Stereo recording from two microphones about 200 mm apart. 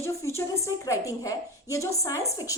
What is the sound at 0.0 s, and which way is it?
A woman's voice, 15° left (ahead or behind).